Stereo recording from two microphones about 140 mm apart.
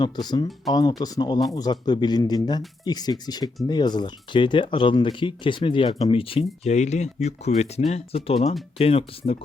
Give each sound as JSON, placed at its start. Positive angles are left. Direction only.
{"t": 0.0, "sound": "speech", "side_deg": 30}